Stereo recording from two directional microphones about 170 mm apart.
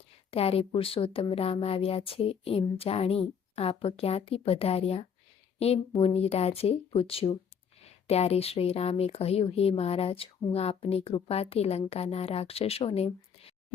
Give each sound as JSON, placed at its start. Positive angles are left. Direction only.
{"t": 0.3, "sound": "speech", "side_deg": 35}